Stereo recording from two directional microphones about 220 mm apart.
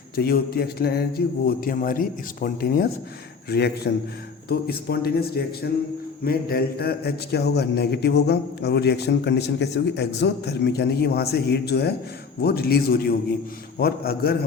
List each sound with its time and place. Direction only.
0.2 s a man's voice: 45° left (ahead or behind)